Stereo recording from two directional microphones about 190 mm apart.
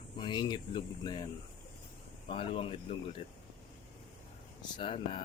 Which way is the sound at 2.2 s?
30° left (ahead or behind).